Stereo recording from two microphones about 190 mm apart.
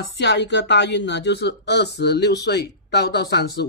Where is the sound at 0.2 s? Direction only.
65° left (ahead or behind).